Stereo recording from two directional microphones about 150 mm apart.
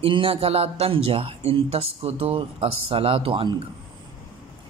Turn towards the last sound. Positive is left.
turn(degrees=-35)  # may be behind; listen again after turning